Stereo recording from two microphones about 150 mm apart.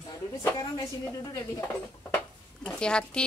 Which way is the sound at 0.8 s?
20° left (ahead or behind).